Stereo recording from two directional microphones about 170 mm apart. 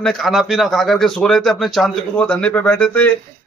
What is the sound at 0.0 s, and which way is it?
Speech, centre (ahead or behind).